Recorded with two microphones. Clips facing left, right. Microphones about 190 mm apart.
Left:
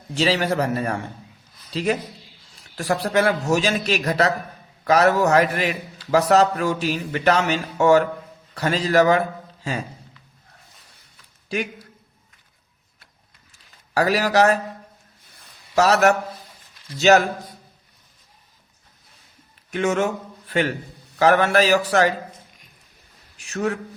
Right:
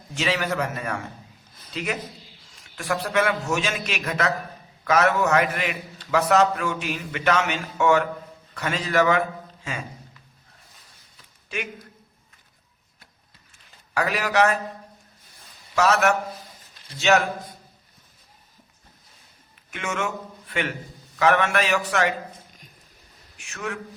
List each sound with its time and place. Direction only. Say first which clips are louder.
0.1 s a man's voice: left 5 dB; 30° left (ahead or behind)
11.4 s a man's voice: left 6 dB; 35° left (ahead or behind)
13.9 s a man's voice: left 4 dB; 35° left (ahead or behind)
15.7 s a man's voice: left 4 dB; 35° left (ahead or behind)
19.7 s a man's voice: left 8 dB; 35° left (ahead or behind)
23.4 s a man's voice: left 8 dB; 35° left (ahead or behind)